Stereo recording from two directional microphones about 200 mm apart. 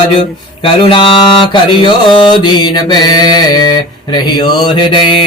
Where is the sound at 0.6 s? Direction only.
25° left (ahead or behind).